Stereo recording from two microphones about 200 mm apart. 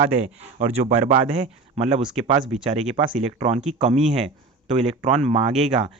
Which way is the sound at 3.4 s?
30° right (ahead or behind).